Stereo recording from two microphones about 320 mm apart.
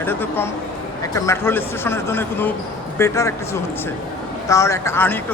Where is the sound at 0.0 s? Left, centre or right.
Centre.